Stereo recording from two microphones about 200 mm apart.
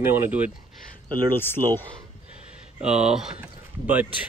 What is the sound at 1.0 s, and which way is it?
Speech, 20° right (ahead or behind).